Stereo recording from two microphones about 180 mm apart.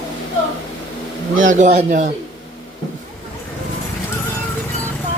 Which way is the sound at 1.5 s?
40° right (ahead or behind).